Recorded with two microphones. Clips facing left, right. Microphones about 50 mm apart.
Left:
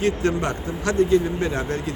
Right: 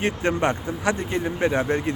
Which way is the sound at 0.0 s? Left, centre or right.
Right.